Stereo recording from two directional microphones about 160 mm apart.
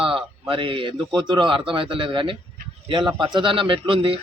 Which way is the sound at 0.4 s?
30° right (ahead or behind).